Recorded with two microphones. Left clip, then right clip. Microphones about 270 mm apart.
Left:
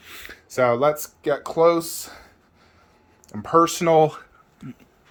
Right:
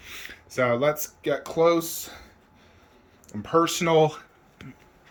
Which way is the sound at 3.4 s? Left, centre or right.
Centre.